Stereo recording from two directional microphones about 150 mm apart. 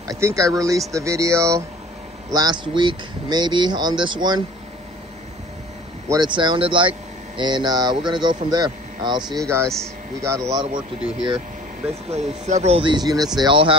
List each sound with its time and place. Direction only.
0.1 s speech: 20° right (ahead or behind)
6.0 s speech: 30° right (ahead or behind)
11.0 s speech: 5° right (ahead or behind)
12.1 s speech: 50° right (ahead or behind); by 13.7 s 35° right (ahead or behind)